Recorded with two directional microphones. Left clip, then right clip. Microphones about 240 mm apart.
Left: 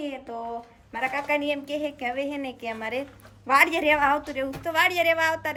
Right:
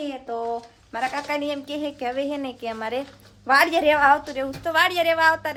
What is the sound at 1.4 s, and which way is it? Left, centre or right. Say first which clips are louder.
A woman's voice: even; centre.